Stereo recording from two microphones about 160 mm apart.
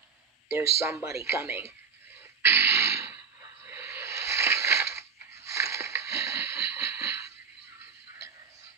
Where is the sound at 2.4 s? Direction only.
15° right (ahead or behind).